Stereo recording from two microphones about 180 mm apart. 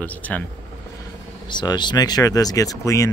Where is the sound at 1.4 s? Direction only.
25° left (ahead or behind).